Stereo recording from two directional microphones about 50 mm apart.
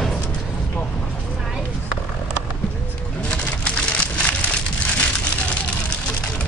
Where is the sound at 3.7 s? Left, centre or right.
Left.